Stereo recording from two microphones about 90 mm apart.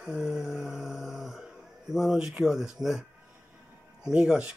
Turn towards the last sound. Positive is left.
turn(degrees=-10)  # may be behind; listen again after turning